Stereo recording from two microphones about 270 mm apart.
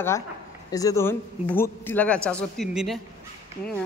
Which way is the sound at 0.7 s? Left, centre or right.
Centre.